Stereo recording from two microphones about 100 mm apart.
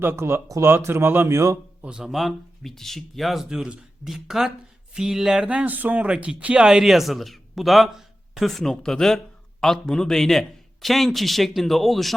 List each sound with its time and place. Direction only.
0.0 s a man's voice: 25° right (ahead or behind)
1.8 s speech: 10° right (ahead or behind)